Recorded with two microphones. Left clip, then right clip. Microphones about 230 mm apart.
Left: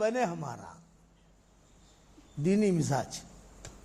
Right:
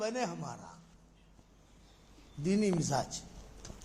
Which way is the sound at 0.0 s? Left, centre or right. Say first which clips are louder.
Left 6 dB; left.